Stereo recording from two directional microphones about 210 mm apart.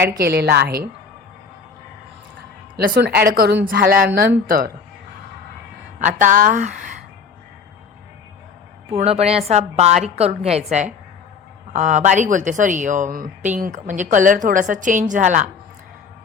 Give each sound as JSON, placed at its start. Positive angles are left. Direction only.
{"t": 0.2, "sound": "a woman's voice", "side_deg": -50}
{"t": 2.7, "sound": "a woman's voice", "side_deg": -50}
{"t": 6.0, "sound": "a woman's voice", "side_deg": -35}
{"t": 8.9, "sound": "a woman's voice", "side_deg": -30}